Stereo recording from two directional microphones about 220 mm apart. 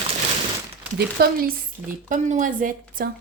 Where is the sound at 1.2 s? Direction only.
45° right (ahead or behind).